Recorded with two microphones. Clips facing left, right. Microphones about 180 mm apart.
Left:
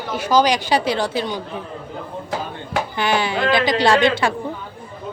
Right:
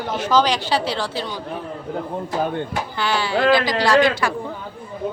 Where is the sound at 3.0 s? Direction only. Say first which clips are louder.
Even; 20° left (ahead or behind).